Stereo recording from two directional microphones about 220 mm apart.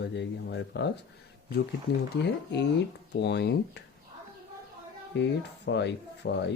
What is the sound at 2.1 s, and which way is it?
Speech, 50° left (ahead or behind).